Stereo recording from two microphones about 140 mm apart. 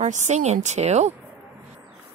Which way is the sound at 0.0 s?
55° right (ahead or behind).